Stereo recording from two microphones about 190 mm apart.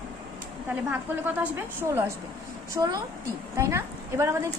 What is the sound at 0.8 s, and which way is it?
A woman's voice, 10° right (ahead or behind).